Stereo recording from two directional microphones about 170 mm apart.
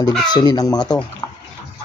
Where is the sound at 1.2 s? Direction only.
20° left (ahead or behind).